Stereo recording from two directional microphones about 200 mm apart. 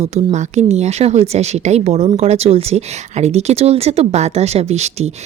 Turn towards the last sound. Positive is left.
turn(degrees=-30)  # may be behind; listen again after turning